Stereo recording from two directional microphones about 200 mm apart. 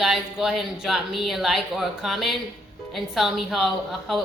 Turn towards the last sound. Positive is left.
turn(degrees=0)  # may be behind; listen again after turning